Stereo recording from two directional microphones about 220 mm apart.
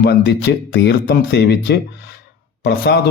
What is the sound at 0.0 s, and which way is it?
Speech, 45° left (ahead or behind).